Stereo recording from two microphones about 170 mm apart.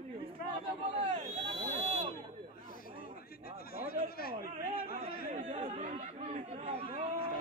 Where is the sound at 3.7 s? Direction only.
60° left (ahead or behind).